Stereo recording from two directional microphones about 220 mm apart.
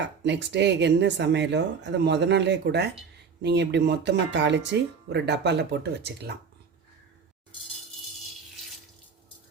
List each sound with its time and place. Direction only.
0.0 s speech: 50° right (ahead or behind)